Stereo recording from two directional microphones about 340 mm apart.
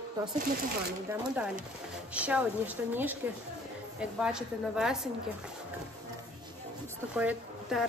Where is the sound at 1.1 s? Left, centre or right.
Centre.